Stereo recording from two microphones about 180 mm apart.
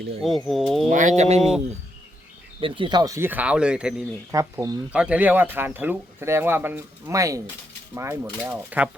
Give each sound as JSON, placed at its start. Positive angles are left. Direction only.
{"t": 0.2, "sound": "speech", "side_deg": 0}
{"t": 0.9, "sound": "speech", "side_deg": -45}
{"t": 1.4, "sound": "speech", "side_deg": 0}
{"t": 2.6, "sound": "speech", "side_deg": -30}
{"t": 4.3, "sound": "speech", "side_deg": -15}
{"t": 4.9, "sound": "speech", "side_deg": -5}